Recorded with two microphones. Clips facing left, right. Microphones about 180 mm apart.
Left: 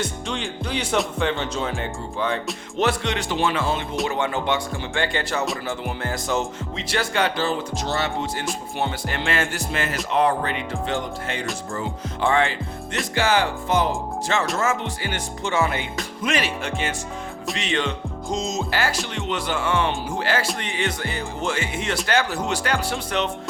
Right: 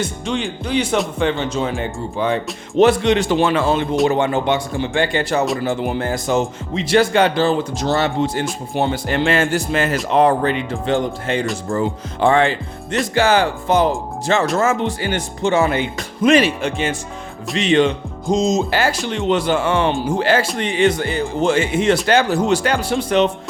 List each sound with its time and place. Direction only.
0.0 s speech: centre (ahead or behind); by 3.2 s 20° right (ahead or behind)
3.2 s speech: 45° right (ahead or behind)
4.1 s speech: 25° right (ahead or behind)
7.9 s speech: 70° right (ahead or behind)
8.7 s speech: 30° right (ahead or behind)